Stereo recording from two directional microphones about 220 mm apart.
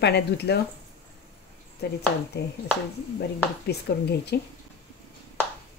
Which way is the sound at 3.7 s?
50° left (ahead or behind).